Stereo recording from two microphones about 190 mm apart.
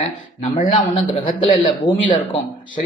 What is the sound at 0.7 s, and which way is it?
Speech, 25° left (ahead or behind).